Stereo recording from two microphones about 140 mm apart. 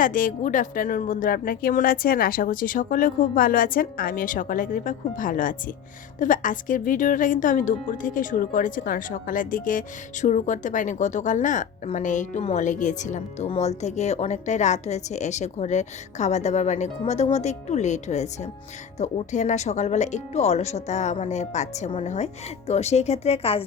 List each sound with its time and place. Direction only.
0.0 s a woman's voice: 75° left (ahead or behind); by 23.6 s 45° left (ahead or behind)